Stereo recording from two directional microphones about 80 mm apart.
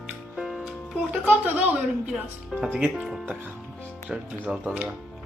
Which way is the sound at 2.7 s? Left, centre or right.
Centre.